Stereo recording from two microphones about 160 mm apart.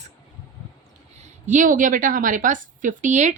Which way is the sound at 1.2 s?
50° right (ahead or behind).